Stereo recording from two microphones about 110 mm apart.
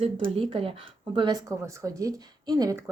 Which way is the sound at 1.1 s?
40° right (ahead or behind).